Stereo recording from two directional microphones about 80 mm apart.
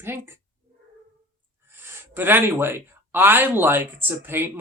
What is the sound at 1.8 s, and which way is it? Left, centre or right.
Speech, right.